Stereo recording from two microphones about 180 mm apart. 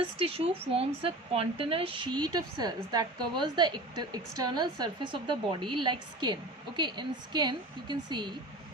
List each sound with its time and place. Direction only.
0.0 s speech: 30° right (ahead or behind)